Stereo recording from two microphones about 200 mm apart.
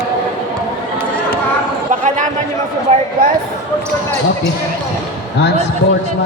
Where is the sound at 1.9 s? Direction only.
40° right (ahead or behind).